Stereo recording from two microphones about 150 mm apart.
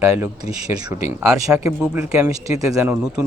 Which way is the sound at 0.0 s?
15° right (ahead or behind).